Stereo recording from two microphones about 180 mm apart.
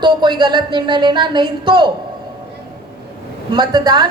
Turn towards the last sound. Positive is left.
turn(degrees=-25)  # may be behind; listen again after turning